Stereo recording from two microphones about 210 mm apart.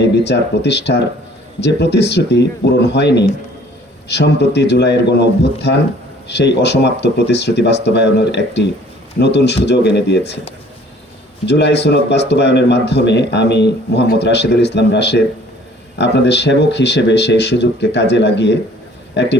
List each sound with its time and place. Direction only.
0.0 s speech: 55° left (ahead or behind)
11.4 s speech: 55° left (ahead or behind)